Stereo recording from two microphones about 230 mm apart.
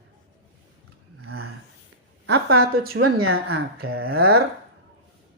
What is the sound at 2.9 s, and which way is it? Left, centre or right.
Speech, right.